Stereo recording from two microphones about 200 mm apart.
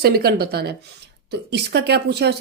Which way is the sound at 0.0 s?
50° right (ahead or behind).